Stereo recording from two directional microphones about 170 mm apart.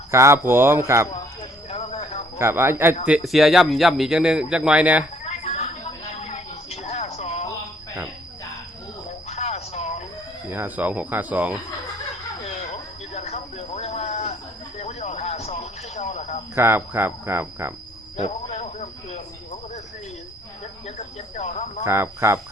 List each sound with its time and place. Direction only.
0.1 s speech: 15° right (ahead or behind)
1.7 s train: 40° left (ahead or behind)
2.4 s speech: 15° right (ahead or behind)
3.1 s speech: centre (ahead or behind)
5.2 s a sound: 40° left (ahead or behind)
9.3 s a sound: 40° left (ahead or behind)
10.5 s speech: 10° right (ahead or behind)
12.5 s train: 40° left (ahead or behind)
14.8 s a sound: 40° left (ahead or behind)
16.6 s speech: 15° right (ahead or behind)
18.2 s a sound: 40° left (ahead or behind)
20.8 s cricket: 40° left (ahead or behind)
21.8 s speech: 15° right (ahead or behind)